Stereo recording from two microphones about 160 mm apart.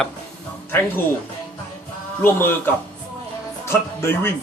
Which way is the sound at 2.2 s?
15° left (ahead or behind).